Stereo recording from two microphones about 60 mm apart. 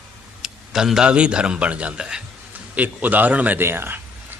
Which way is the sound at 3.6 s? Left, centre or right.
Right.